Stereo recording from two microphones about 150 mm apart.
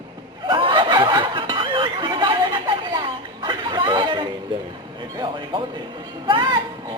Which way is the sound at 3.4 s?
30° right (ahead or behind).